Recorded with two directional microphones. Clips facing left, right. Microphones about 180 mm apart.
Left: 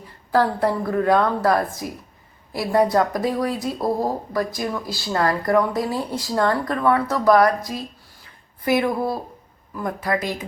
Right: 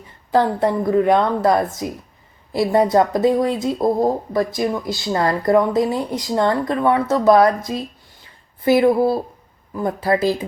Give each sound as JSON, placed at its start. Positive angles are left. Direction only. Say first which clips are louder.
{"t": 0.3, "sound": "speech", "louder": "right 2 dB", "side_deg": -20}